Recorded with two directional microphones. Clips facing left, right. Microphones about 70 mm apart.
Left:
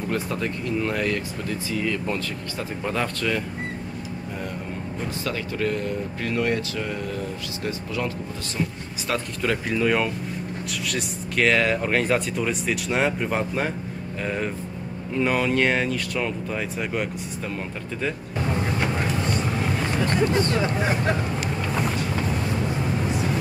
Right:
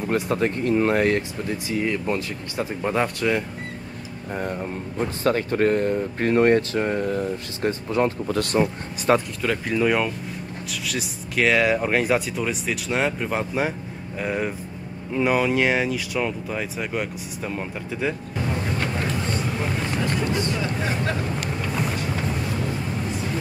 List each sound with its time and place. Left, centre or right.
0.1 s speech: right
4.4 s speech: right
9.1 s speech: right
9.4 s speech: centre
20.8 s speech: left